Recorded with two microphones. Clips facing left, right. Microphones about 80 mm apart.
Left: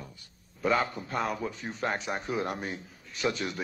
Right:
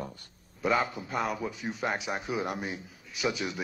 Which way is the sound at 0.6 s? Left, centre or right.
Centre.